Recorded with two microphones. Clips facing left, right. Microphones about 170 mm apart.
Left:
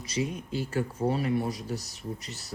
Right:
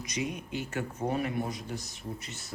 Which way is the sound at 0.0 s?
30° left (ahead or behind).